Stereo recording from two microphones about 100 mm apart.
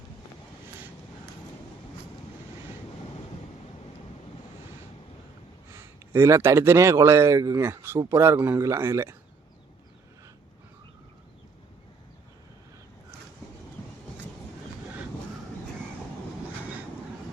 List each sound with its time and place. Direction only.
5.7 s speech: 25° right (ahead or behind)